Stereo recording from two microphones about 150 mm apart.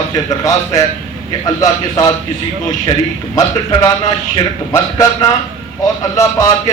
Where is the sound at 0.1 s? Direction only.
25° left (ahead or behind).